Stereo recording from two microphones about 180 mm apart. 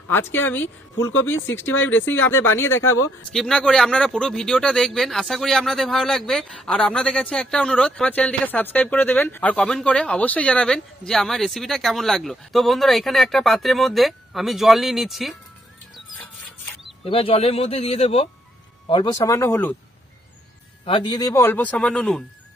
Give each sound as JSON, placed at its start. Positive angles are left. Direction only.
{"t": 0.1, "sound": "a man's voice", "side_deg": 10}
{"t": 1.8, "sound": "a man's voice", "side_deg": 10}
{"t": 3.3, "sound": "speech", "side_deg": 5}
{"t": 17.0, "sound": "a man's voice", "side_deg": 35}
{"t": 20.8, "sound": "a man's voice", "side_deg": 25}